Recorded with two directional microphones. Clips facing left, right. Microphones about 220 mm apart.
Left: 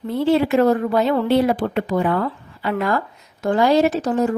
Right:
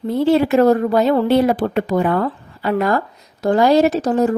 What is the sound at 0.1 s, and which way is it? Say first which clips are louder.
A woman's voice: right 2 dB; 40° right (ahead or behind).